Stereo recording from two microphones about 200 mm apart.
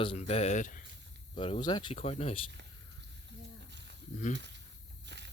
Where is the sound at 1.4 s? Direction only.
25° left (ahead or behind).